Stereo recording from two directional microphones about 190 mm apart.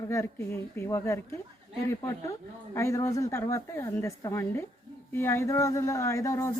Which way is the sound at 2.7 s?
15° left (ahead or behind).